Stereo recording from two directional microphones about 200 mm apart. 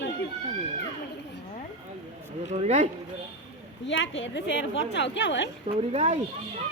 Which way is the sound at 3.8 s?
65° left (ahead or behind).